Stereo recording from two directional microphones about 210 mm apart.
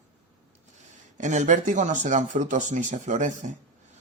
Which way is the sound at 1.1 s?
35° right (ahead or behind).